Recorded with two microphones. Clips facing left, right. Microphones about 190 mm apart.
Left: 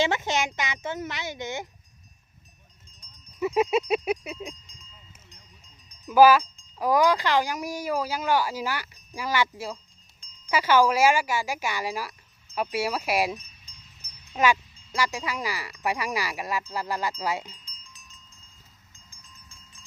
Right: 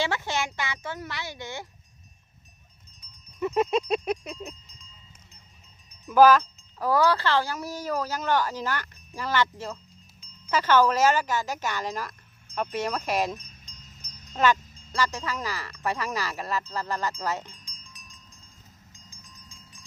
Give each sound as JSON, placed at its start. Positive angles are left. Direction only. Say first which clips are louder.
{"t": 0.0, "sound": "speech", "louder": "left 3 dB", "side_deg": 20}
{"t": 3.4, "sound": "speech", "louder": "left 1 dB", "side_deg": 10}
{"t": 6.1, "sound": "speech", "louder": "left 1 dB", "side_deg": 10}
{"t": 18.9, "sound": "a sound", "louder": "right 1 dB", "side_deg": -15}